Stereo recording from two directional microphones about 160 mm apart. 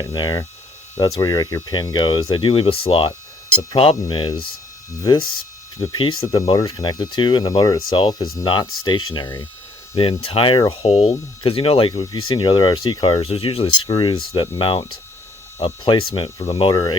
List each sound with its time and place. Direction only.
0.0 s speech: 25° left (ahead or behind)
5.7 s speech: 25° left (ahead or behind)